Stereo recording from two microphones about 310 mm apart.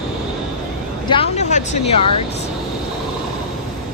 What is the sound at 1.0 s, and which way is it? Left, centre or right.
Speech, centre.